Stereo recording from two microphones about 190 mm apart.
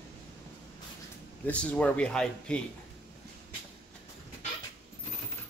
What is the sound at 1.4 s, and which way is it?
Speech, 5° left (ahead or behind).